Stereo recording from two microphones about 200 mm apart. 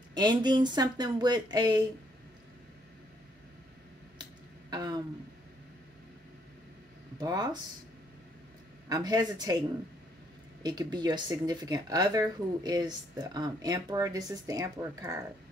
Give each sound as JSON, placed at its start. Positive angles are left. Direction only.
{"t": 0.1, "sound": "speech", "side_deg": -20}
{"t": 4.6, "sound": "a sound", "side_deg": -20}
{"t": 7.2, "sound": "speech", "side_deg": -20}
{"t": 8.8, "sound": "speech", "side_deg": -20}
{"t": 10.6, "sound": "speech", "side_deg": -20}